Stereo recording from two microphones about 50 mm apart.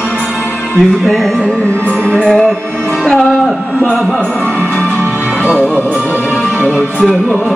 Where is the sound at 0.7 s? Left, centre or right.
Centre.